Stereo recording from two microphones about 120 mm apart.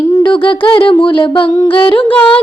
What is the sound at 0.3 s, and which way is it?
Speech, 45° left (ahead or behind).